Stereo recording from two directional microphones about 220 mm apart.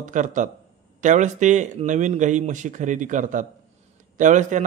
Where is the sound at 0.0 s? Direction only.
35° right (ahead or behind).